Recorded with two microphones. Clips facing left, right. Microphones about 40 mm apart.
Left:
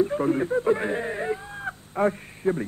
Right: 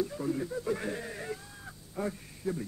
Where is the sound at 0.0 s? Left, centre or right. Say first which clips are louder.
Left 10 dB; left.